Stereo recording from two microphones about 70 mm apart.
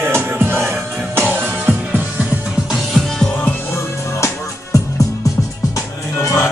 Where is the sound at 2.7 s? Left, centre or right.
Centre.